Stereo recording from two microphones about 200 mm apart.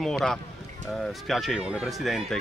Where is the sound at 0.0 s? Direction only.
Centre (ahead or behind).